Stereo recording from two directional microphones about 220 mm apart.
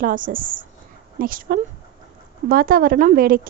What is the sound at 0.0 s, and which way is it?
A woman's voice, 40° right (ahead or behind).